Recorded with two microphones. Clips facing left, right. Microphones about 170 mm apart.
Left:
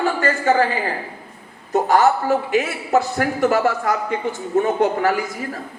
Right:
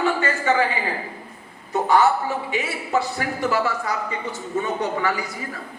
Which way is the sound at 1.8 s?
45° left (ahead or behind).